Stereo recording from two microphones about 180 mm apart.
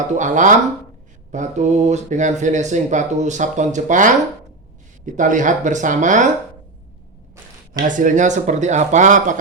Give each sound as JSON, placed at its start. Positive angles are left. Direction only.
{"t": 0.2, "sound": "speech", "side_deg": -45}
{"t": 5.1, "sound": "speech", "side_deg": -45}
{"t": 7.9, "sound": "speech", "side_deg": -45}